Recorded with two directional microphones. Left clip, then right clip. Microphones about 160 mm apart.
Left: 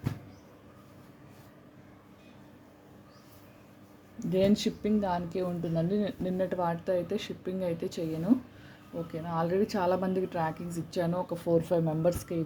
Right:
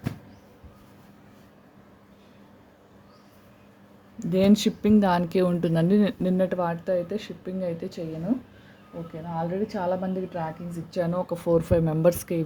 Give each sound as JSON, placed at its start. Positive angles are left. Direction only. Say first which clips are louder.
{"t": 4.2, "sound": "speech", "louder": "right 5 dB", "side_deg": -25}
{"t": 9.3, "sound": "a woman's voice", "louder": "even", "side_deg": 20}
{"t": 10.8, "sound": "a woman's voice", "louder": "right 4 dB", "side_deg": 0}
{"t": 11.1, "sound": "speech", "louder": "right 5 dB", "side_deg": -20}